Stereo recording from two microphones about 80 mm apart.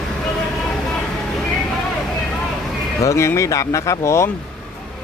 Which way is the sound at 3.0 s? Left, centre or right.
Left.